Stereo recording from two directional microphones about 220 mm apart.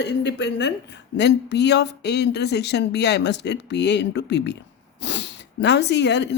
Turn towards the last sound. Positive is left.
turn(degrees=50)  # may be behind; listen again after turning